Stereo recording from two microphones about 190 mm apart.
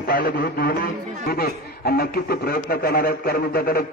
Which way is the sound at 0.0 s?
50° left (ahead or behind).